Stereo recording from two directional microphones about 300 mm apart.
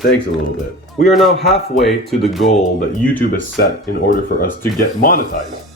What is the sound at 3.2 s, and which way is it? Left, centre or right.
Speech, left.